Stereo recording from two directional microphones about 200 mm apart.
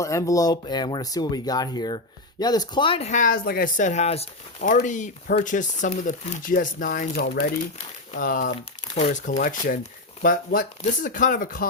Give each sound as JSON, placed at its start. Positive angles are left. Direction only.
{"t": 0.0, "sound": "speech", "side_deg": 15}